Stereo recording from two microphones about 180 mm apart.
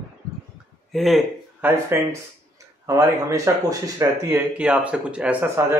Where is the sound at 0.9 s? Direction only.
Centre (ahead or behind).